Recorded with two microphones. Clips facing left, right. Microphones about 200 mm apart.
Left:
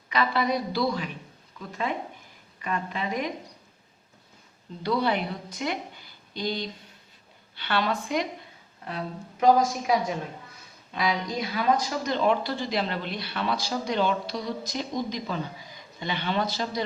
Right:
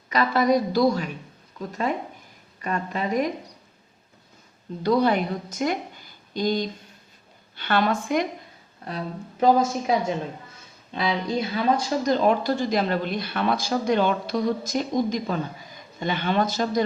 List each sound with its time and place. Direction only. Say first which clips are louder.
0.1 s a woman's voice: right 5 dB; 45° right (ahead or behind)
4.8 s a woman's voice: right 5 dB; 45° right (ahead or behind)
9.4 s a woman's voice: right 1 dB; 25° right (ahead or behind); by 16.8 s 50° right (ahead or behind)